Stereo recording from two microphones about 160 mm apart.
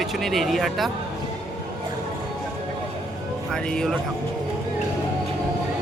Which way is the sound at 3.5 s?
5° left (ahead or behind).